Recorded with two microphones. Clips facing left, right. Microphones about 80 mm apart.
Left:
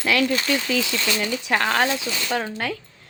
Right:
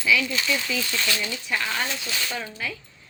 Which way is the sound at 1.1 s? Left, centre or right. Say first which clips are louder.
Left 6 dB; left.